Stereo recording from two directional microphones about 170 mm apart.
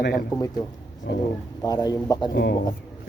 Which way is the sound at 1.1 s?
90° left.